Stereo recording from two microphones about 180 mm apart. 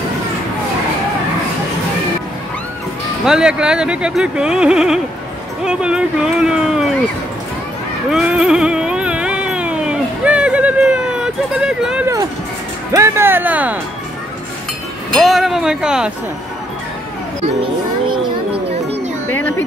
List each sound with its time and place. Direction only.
3.3 s speech: 5° right (ahead or behind)
8.1 s a sound: 5° right (ahead or behind)
12.9 s speech: 15° right (ahead or behind)
15.1 s speech: centre (ahead or behind)
18.0 s children playing: 30° right (ahead or behind)
19.3 s a sound: 10° left (ahead or behind)